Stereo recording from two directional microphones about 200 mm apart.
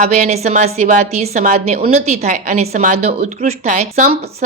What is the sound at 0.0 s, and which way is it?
A woman's voice, 35° right (ahead or behind).